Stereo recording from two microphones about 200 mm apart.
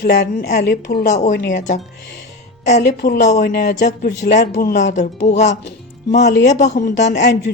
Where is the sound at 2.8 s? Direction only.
55° left (ahead or behind).